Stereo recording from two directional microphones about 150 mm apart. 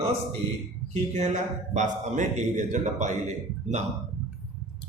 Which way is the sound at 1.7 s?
55° right (ahead or behind).